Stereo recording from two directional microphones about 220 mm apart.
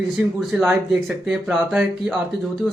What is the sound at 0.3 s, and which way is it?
Speech, 5° right (ahead or behind).